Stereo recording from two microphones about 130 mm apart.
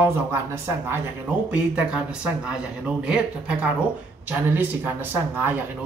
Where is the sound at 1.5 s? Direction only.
10° right (ahead or behind).